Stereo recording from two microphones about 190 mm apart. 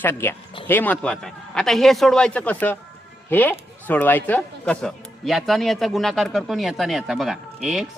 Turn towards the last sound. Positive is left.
turn(degrees=0)  # may be behind; listen again after turning